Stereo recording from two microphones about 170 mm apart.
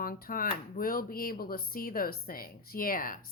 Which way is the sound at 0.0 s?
60° left (ahead or behind).